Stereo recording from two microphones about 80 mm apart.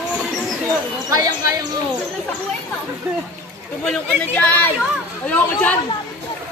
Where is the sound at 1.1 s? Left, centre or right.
Right.